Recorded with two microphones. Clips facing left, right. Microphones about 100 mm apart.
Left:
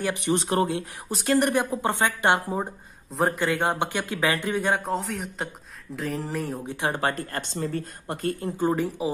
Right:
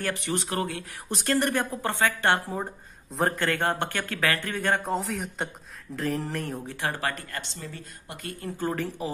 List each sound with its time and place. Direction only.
0.0 s speech: 20° left (ahead or behind)
1.0 s speech: 5° left (ahead or behind)
3.1 s speech: 5° left (ahead or behind)
4.8 s a man's voice: centre (ahead or behind)
6.7 s speech: 20° left (ahead or behind); by 8.4 s 40° left (ahead or behind)
8.4 s speech: 20° left (ahead or behind)